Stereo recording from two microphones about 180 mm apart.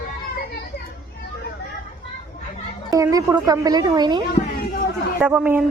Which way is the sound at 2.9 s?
20° right (ahead or behind).